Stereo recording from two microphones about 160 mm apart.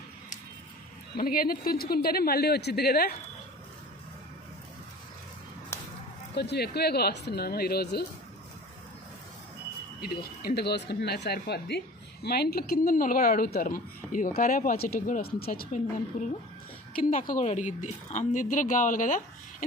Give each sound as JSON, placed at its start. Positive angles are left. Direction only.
{"t": 1.1, "sound": "a woman's voice", "side_deg": 65}
{"t": 6.3, "sound": "speech", "side_deg": 90}
{"t": 10.0, "sound": "a woman's voice", "side_deg": 80}
{"t": 16.9, "sound": "a woman's voice", "side_deg": 55}